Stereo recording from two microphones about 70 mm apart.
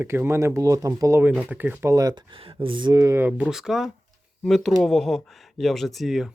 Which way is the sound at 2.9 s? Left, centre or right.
Right.